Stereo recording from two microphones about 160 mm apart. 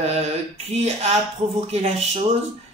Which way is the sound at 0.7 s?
45° right (ahead or behind).